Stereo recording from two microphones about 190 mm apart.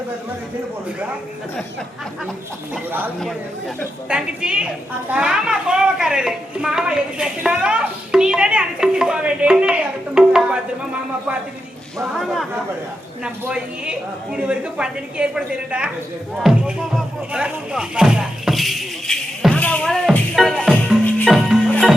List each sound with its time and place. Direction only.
2.7 s speech: 10° right (ahead or behind)
4.1 s speech: 5° right (ahead or behind)
10.2 s music: 5° right (ahead or behind)
12.1 s speech: centre (ahead or behind)
16.3 s music: 5° right (ahead or behind)